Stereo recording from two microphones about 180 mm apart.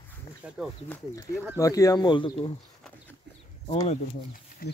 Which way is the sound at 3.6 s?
30° left (ahead or behind).